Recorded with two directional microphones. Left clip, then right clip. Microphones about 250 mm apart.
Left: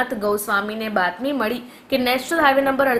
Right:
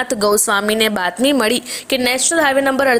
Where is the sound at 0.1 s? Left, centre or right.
Right.